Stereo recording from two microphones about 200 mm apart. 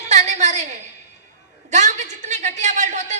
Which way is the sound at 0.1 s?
35° right (ahead or behind).